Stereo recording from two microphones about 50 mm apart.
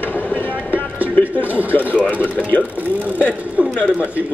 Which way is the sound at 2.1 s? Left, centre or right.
Left.